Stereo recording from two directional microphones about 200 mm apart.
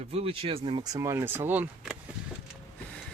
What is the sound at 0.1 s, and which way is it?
Speech, 30° right (ahead or behind).